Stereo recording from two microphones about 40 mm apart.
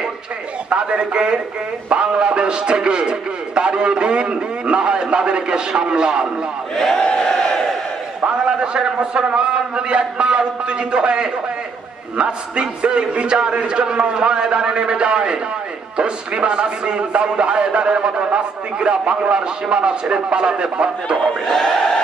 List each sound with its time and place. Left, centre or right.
0.7 s a man's voice: right
6.7 s speech: centre
7.0 s battle cry: centre
7.2 s crowd: centre
8.5 s a man's voice: right
21.2 s speech: centre